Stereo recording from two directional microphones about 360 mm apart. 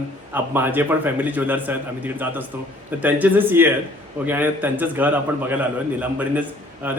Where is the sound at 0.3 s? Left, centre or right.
Centre.